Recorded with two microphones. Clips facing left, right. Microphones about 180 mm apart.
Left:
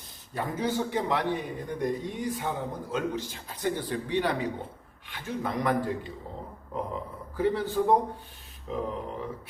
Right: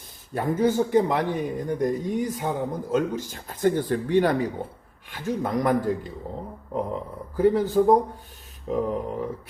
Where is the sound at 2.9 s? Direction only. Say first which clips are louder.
Right 6 dB; 45° right (ahead or behind).